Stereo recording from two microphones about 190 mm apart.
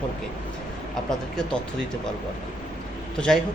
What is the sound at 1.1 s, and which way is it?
Speech, 5° left (ahead or behind).